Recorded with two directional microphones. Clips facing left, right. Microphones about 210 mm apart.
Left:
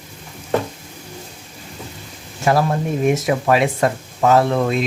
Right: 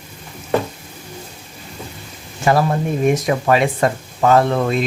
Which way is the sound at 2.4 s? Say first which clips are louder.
Right 1 dB; centre (ahead or behind).